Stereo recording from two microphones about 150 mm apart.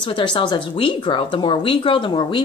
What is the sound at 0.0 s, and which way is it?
Speech, 30° left (ahead or behind).